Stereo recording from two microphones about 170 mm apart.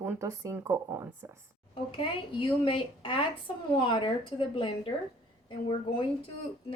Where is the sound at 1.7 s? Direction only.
30° left (ahead or behind).